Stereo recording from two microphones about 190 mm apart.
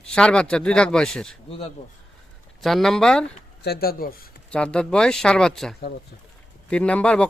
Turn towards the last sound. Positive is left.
turn(degrees=5)  # may be behind; listen again after turning